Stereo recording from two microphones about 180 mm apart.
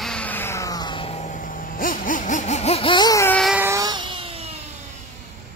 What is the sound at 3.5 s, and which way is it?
Vehicle, 15° right (ahead or behind).